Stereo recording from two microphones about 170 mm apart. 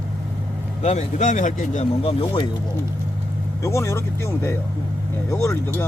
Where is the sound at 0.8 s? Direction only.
45° left (ahead or behind).